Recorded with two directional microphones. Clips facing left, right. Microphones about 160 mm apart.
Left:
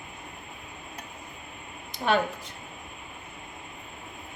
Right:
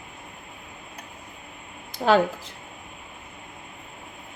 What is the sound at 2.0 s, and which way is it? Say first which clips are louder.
Speech: right 6 dB; 55° right (ahead or behind).